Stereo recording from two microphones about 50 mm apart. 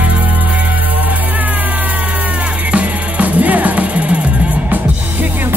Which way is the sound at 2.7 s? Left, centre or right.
Right.